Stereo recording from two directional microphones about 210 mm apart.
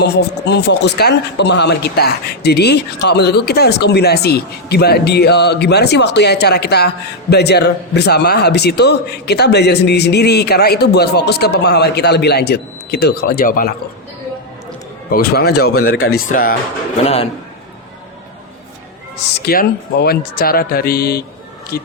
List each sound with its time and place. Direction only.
0.0 s a man's voice: 50° left (ahead or behind)
15.1 s a man's voice: 45° left (ahead or behind)
17.0 s a man's voice: 30° left (ahead or behind)
19.3 s a man's voice: 45° left (ahead or behind)